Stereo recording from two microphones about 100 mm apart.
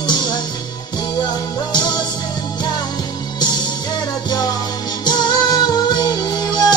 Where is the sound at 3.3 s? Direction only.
45° left (ahead or behind).